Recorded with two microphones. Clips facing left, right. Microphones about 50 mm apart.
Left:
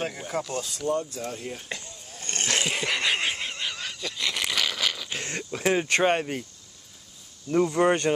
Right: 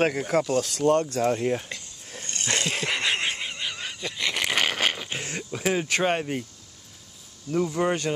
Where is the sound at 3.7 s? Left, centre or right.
Centre; by 5.0 s right.